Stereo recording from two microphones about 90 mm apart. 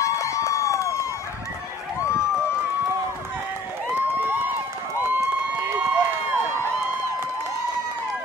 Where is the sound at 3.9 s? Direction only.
20° right (ahead or behind).